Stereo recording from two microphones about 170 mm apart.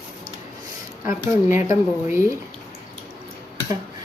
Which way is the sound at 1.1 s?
15° right (ahead or behind).